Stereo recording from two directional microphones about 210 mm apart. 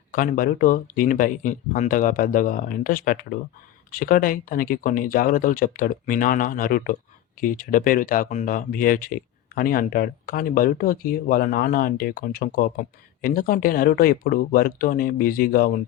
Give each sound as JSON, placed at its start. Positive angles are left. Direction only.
{"t": 0.1, "sound": "speech", "side_deg": 40}